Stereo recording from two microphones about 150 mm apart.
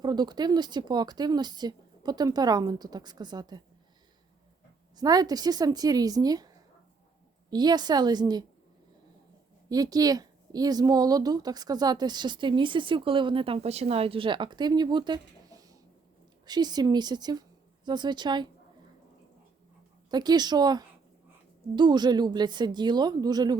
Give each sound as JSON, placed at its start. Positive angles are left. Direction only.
{"t": 0.0, "sound": "speech", "side_deg": -30}
{"t": 4.9, "sound": "speech", "side_deg": -25}
{"t": 7.5, "sound": "speech", "side_deg": -25}
{"t": 9.6, "sound": "speech", "side_deg": -25}
{"t": 20.1, "sound": "speech", "side_deg": -30}